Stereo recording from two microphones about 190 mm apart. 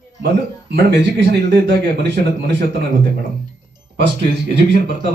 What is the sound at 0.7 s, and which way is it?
Speech, 65° right (ahead or behind).